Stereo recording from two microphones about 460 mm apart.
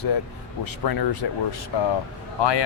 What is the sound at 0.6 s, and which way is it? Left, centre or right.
Speech, left.